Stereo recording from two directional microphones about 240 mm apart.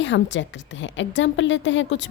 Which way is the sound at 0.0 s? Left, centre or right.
Left.